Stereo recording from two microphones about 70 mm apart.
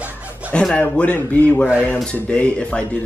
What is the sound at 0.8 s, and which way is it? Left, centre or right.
Speech, left.